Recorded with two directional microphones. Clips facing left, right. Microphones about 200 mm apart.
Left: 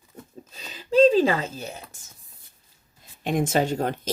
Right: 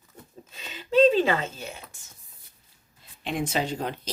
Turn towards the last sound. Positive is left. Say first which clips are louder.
# left 5 dB
turn(degrees=45)  # may be behind; listen again after turning